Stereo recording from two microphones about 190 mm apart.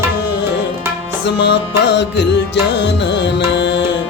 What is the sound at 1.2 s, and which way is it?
Music, 65° left (ahead or behind).